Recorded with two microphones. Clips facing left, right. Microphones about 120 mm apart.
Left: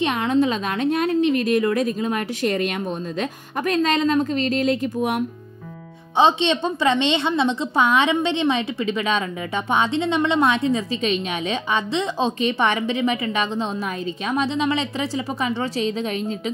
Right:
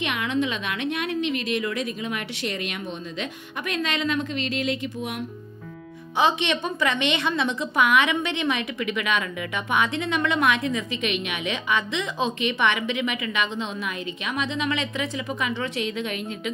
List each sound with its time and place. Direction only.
0.0 s a woman's voice: 35° left (ahead or behind)
6.1 s a woman's voice: 25° left (ahead or behind)